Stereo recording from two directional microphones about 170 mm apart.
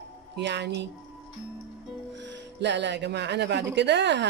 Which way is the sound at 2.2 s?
90° right.